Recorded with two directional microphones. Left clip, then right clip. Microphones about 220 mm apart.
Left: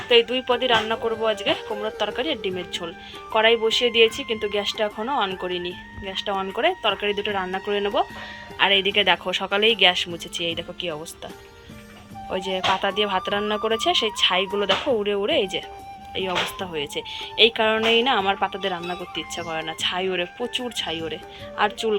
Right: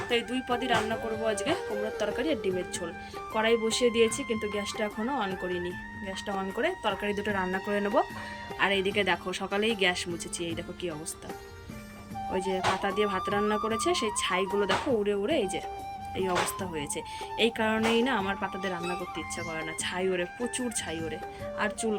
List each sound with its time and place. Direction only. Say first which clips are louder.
0.1 s speech: left 12 dB; 10° right (ahead or behind)
12.3 s speech: left 6 dB; 5° right (ahead or behind)